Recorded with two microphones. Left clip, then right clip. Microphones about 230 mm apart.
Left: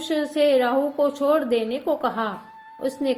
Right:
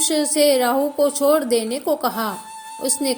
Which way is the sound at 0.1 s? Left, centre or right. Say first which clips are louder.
Right 1 dB; right.